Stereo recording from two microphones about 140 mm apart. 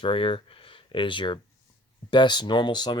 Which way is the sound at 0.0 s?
40° left (ahead or behind).